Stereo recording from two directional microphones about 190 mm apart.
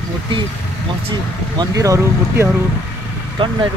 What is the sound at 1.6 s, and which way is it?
Speech, 15° right (ahead or behind).